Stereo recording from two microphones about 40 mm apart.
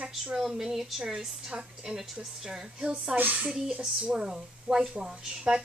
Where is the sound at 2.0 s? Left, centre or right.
Centre.